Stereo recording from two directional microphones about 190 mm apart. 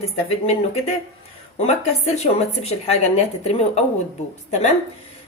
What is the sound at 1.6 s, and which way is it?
A woman's voice, 35° left (ahead or behind).